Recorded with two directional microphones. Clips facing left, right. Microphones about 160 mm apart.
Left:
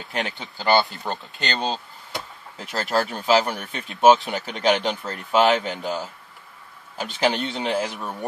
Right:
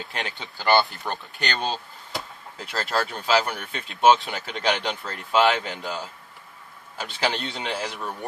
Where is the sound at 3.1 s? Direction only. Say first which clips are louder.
Left 3 dB; 25° left (ahead or behind).